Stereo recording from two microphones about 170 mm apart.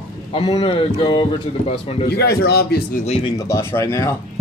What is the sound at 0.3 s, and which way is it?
Speech, 30° left (ahead or behind).